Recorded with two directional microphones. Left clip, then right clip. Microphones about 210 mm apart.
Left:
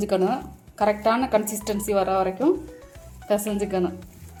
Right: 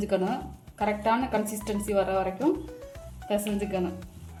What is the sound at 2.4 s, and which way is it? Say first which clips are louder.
Speech: left 5 dB; centre (ahead or behind).